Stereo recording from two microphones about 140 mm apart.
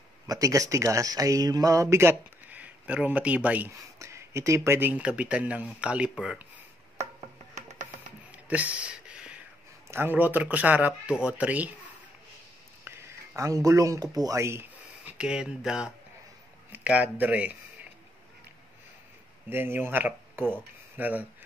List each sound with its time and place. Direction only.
0.3 s speech: 25° right (ahead or behind); by 6.4 s 5° right (ahead or behind)
8.5 s a sound: 10° right (ahead or behind)
9.8 s speech: 15° right (ahead or behind)
12.8 s a sound: 15° right (ahead or behind)
14.1 s speech: 25° right (ahead or behind)
19.5 s speech: 15° right (ahead or behind)